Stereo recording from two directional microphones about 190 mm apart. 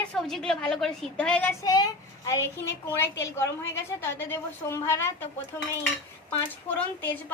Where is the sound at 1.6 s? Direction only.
20° left (ahead or behind).